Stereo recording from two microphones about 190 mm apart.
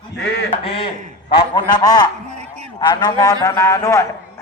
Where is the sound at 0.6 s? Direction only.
30° left (ahead or behind).